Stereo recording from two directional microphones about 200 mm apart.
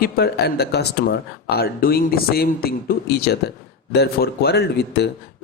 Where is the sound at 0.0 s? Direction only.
50° left (ahead or behind).